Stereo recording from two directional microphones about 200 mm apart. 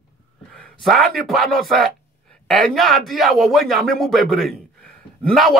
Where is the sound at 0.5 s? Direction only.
5° left (ahead or behind).